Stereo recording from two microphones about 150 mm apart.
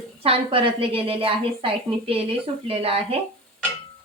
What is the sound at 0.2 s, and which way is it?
Stir, 35° right (ahead or behind).